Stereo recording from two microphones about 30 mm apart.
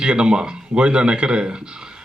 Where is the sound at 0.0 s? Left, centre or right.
Right.